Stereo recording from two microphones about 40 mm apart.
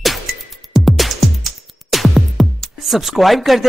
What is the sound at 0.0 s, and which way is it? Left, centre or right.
Music, centre.